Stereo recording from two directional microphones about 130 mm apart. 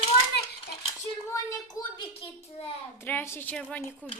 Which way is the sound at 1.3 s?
25° left (ahead or behind).